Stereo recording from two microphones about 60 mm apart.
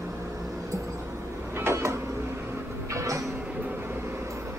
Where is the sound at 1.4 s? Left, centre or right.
Right.